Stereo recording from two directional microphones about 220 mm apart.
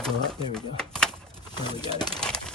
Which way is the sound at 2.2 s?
5° left (ahead or behind).